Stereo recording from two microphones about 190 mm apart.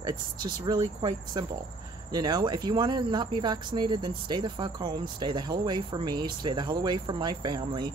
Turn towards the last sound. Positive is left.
turn(degrees=-20)  # may be behind; listen again after turning